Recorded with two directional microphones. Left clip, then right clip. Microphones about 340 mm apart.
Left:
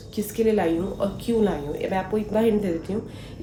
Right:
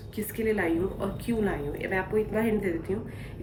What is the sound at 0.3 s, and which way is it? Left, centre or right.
A woman's voice, centre.